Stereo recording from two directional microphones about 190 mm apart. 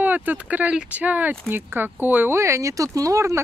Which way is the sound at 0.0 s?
10° right (ahead or behind).